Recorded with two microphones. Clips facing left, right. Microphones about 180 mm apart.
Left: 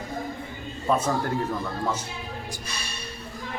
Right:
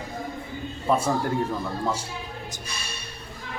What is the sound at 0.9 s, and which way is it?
Speech, 10° right (ahead or behind).